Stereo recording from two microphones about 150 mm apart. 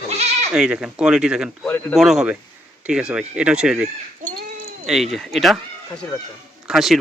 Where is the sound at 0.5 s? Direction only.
5° right (ahead or behind).